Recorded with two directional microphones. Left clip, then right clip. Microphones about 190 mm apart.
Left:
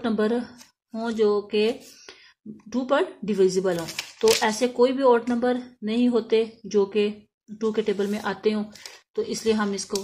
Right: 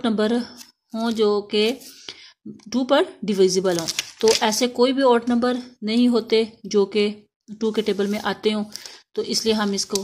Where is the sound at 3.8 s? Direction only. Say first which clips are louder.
Right 5 dB; 20° right (ahead or behind).